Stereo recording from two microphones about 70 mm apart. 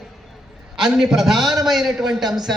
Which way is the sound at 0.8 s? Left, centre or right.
Centre.